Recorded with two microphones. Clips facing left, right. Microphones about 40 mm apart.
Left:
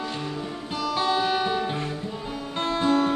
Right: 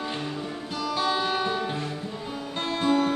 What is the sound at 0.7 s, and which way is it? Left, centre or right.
Music, centre.